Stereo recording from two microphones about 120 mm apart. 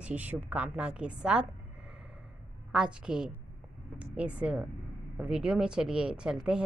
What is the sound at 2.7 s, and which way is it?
A woman's voice, 5° right (ahead or behind).